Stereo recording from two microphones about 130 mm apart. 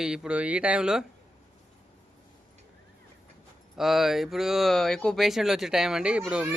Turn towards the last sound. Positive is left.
turn(degrees=-10)  # may be behind; listen again after turning